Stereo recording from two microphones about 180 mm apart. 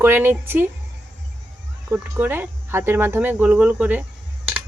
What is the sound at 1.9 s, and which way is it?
Speech, 10° right (ahead or behind).